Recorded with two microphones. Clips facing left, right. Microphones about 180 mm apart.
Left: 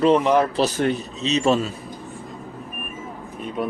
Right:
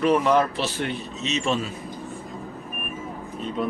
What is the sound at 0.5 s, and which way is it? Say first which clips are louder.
Speech: left 7 dB; 40° left (ahead or behind).